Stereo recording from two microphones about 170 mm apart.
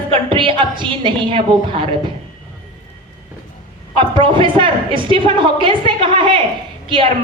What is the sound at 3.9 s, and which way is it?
A woman's voice, 30° right (ahead or behind).